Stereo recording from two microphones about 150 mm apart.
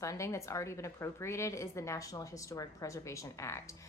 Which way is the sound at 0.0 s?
20° left (ahead or behind).